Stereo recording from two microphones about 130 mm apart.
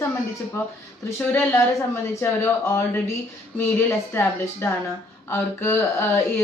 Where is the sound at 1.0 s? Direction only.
15° left (ahead or behind).